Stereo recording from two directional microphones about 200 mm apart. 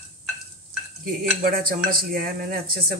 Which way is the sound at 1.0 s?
45° right (ahead or behind).